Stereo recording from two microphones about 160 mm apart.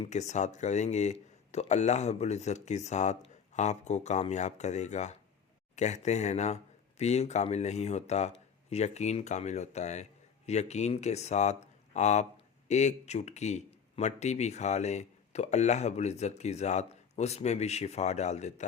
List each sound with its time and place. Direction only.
0.0 s speech: 45° left (ahead or behind)